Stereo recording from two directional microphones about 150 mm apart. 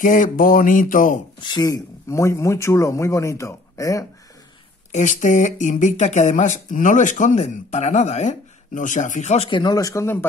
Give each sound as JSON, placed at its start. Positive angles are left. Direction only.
{"t": 0.0, "sound": "speech", "side_deg": 60}
{"t": 1.4, "sound": "speech", "side_deg": 25}
{"t": 4.9, "sound": "speech", "side_deg": 55}
{"t": 9.5, "sound": "speech", "side_deg": 30}